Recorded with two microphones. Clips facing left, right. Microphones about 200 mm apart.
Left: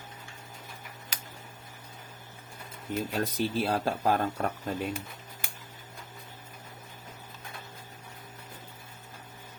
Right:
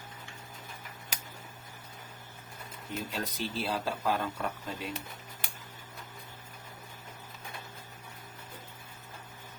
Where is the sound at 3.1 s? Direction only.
50° left (ahead or behind).